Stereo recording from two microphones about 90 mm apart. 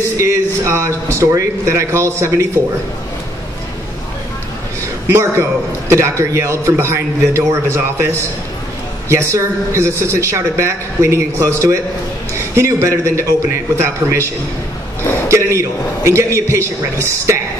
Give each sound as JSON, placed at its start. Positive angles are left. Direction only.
{"t": 0.2, "sound": "a man's voice", "side_deg": -30}
{"t": 5.1, "sound": "a man's voice", "side_deg": -30}
{"t": 9.1, "sound": "a man's voice", "side_deg": -35}